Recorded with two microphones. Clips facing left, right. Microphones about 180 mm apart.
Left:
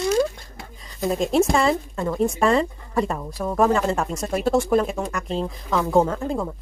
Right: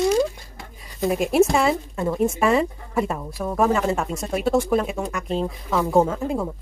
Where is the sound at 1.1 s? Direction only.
10° right (ahead or behind).